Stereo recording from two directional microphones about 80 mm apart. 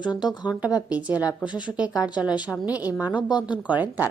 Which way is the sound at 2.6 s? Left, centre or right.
Centre.